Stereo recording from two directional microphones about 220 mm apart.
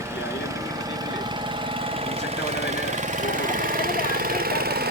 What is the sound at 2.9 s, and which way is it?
Lawn mower, 35° right (ahead or behind).